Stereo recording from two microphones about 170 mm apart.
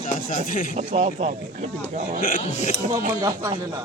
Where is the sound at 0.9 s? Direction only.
40° right (ahead or behind).